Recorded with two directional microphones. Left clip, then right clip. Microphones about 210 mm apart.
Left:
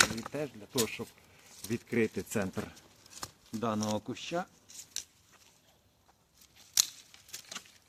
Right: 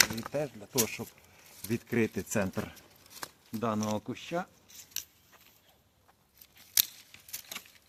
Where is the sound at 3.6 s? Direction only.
15° right (ahead or behind).